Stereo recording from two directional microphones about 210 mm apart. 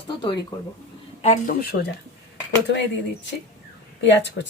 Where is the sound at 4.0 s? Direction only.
55° left (ahead or behind).